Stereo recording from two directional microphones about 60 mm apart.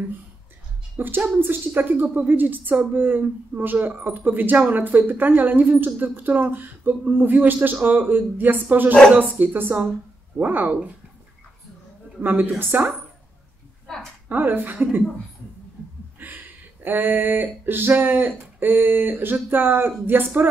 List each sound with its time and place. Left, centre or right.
0.9 s a woman's voice: right
12.2 s a woman's voice: right
14.3 s a woman's voice: right
16.2 s a sound: right
16.8 s a woman's voice: right